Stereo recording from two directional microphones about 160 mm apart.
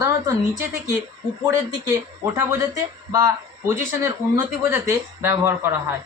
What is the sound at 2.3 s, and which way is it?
Speech, 20° right (ahead or behind).